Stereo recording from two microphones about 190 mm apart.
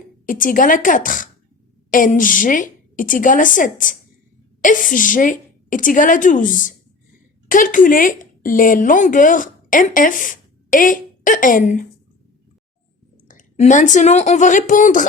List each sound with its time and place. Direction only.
0.3 s a woman's voice: 45° left (ahead or behind)
13.2 s speech: 40° left (ahead or behind)